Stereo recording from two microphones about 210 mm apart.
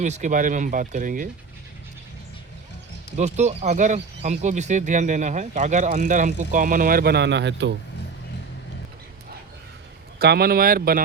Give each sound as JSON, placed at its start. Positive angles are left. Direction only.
{"t": 0.0, "sound": "speech", "side_deg": -35}
{"t": 3.2, "sound": "speech", "side_deg": -35}
{"t": 10.2, "sound": "speech", "side_deg": -50}